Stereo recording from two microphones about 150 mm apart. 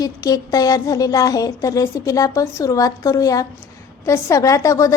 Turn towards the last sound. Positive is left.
turn(degrees=20)  # may be behind; listen again after turning